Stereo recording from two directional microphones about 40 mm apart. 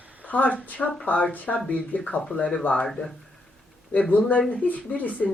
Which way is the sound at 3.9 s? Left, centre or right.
Left.